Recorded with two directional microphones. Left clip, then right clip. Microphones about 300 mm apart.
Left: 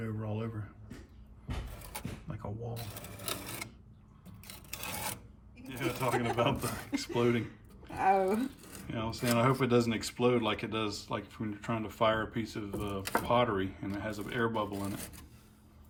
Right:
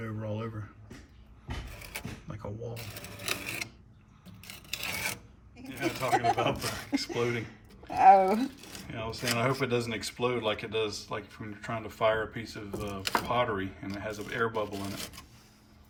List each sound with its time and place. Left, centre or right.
0.0 s a sound: centre
2.0 s cash register: centre
4.8 s filing: centre
5.6 s a man's voice: centre
7.9 s a sound: right
8.7 s speech: centre